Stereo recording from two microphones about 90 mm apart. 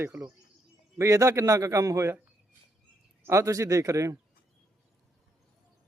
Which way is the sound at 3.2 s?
35° right (ahead or behind).